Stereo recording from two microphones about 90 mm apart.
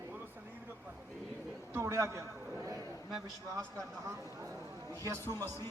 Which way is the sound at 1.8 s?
30° right (ahead or behind).